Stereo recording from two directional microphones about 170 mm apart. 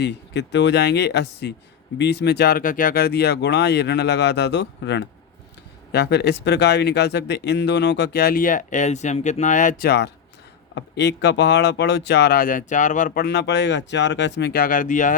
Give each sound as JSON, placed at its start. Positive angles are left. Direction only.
{"t": 0.0, "sound": "speech", "side_deg": 90}
{"t": 10.8, "sound": "speech", "side_deg": 90}